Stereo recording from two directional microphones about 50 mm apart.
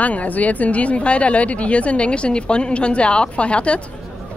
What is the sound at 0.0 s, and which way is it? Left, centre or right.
A man's voice, left.